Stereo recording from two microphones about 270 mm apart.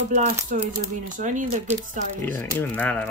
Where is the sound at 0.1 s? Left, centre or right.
Right.